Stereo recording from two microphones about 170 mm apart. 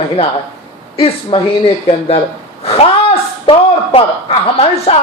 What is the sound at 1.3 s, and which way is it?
Speech, 30° left (ahead or behind).